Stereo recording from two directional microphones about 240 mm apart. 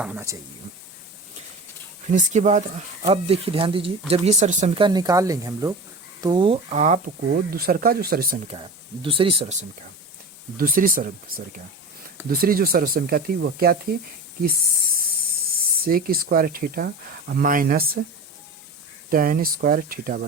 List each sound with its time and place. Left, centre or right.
0.0 s speech: centre
2.0 s speech: right
8.4 s speech: right
15.8 s speech: right
19.1 s speech: right